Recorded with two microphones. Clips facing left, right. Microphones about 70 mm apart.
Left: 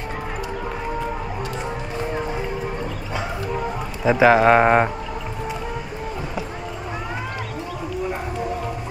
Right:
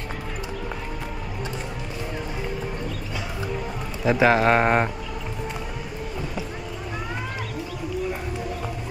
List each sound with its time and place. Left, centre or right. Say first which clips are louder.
4.0 s speech: left 4 dB; centre